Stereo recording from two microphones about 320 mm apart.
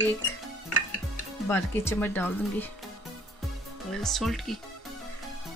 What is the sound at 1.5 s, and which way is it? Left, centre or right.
Speech, centre.